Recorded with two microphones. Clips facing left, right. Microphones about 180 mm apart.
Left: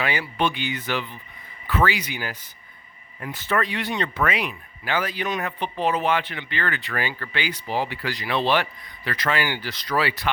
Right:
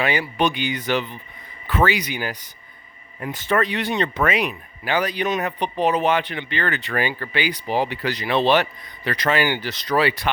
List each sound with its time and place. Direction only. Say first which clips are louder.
0.0 s speech: right 3 dB; 15° right (ahead or behind)